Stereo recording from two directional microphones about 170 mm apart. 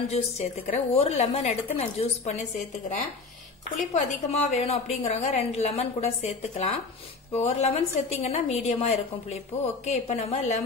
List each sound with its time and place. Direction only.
0.1 s a woman's voice: 40° left (ahead or behind)
3.9 s a woman's voice: 40° left (ahead or behind)